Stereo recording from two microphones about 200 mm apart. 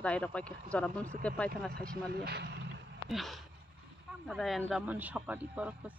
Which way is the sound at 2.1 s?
55° right (ahead or behind).